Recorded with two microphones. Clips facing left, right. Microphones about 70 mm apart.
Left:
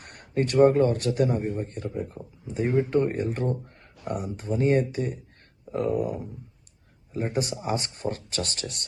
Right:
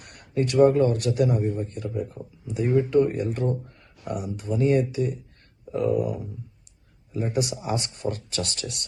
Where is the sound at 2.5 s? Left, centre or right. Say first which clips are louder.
Right 2 dB; left.